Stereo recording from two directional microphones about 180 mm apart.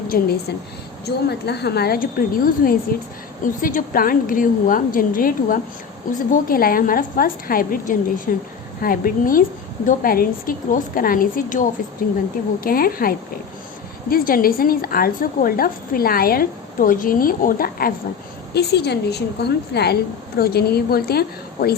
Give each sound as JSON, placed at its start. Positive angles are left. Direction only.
{"t": 0.1, "sound": "a woman's voice", "side_deg": 60}
{"t": 18.5, "sound": "a woman's voice", "side_deg": 65}